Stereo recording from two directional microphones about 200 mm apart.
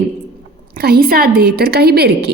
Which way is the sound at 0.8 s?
50° right (ahead or behind).